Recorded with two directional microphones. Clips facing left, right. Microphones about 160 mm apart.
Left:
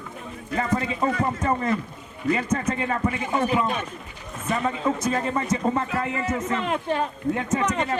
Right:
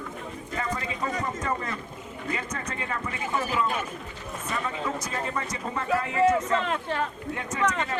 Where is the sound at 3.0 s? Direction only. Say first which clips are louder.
Left 5 dB; 25° left (ahead or behind).